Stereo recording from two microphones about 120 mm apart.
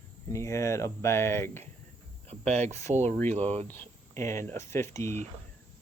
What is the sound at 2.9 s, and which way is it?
Speech, 75° right (ahead or behind).